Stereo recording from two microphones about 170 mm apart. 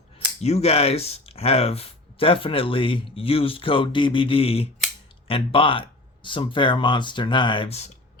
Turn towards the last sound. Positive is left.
turn(degrees=35)  # may be behind; listen again after turning